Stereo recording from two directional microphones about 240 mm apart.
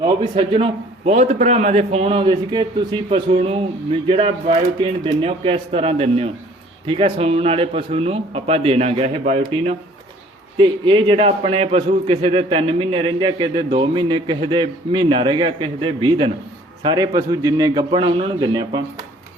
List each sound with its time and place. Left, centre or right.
0.0 s a man's voice: right